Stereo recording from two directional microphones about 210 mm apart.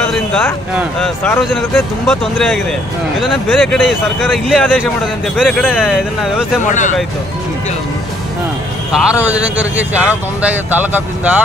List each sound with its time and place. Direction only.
0.1 s a sound: 5° left (ahead or behind)
0.9 s speech: 5° left (ahead or behind)
6.6 s speech: 35° left (ahead or behind)
8.9 s speech: 5° right (ahead or behind)